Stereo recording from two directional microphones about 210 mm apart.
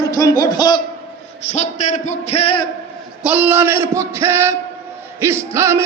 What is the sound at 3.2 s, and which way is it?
A man's voice, 5° right (ahead or behind).